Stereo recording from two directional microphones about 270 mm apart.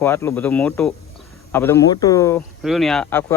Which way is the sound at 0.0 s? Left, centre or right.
Centre.